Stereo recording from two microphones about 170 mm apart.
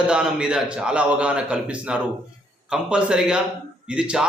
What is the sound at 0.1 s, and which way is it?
A man's voice, 5° right (ahead or behind).